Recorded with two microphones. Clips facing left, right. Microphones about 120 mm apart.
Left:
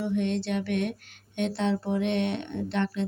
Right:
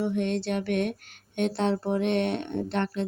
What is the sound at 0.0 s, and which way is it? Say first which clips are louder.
Speech: right 1 dB; 45° right (ahead or behind).